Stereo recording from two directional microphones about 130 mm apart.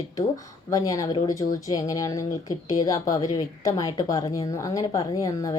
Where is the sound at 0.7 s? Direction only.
25° left (ahead or behind).